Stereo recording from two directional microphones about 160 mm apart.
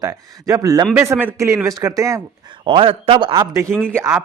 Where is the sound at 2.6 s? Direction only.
35° right (ahead or behind).